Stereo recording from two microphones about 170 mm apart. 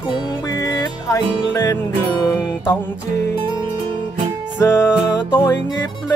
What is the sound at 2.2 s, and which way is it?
Music, 15° left (ahead or behind).